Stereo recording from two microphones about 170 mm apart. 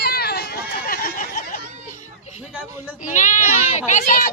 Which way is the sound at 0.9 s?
55° left (ahead or behind).